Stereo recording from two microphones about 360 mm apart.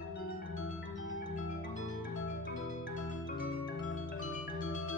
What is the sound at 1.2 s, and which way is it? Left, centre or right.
Marimba, left.